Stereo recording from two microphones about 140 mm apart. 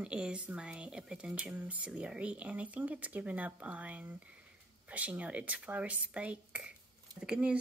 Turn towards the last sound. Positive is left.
turn(degrees=-5)  # may be behind; listen again after turning